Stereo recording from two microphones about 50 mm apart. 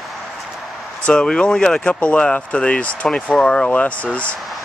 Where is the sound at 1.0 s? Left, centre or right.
Centre.